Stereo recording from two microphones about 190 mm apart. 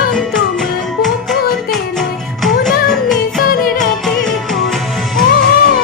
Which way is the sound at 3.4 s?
50° left (ahead or behind).